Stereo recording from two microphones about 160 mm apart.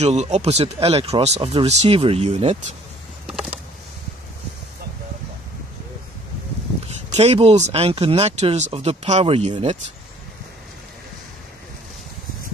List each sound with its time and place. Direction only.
0.0 s speech: 45° right (ahead or behind)
3.3 s a sound: 5° right (ahead or behind)
7.2 s speech: 40° right (ahead or behind)